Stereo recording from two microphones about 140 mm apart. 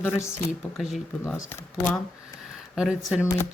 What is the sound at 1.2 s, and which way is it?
Speech, 15° left (ahead or behind).